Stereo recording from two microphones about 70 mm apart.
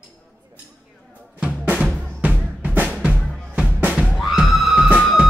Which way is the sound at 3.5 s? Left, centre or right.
Centre.